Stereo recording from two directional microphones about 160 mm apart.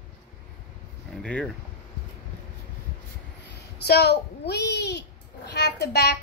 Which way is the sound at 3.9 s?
90° left.